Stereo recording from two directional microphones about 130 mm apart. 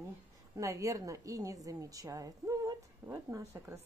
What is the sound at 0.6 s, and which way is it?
A woman's voice, 25° right (ahead or behind).